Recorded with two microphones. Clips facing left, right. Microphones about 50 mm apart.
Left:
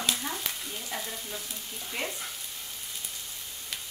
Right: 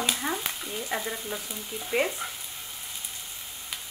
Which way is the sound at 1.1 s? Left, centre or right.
Right.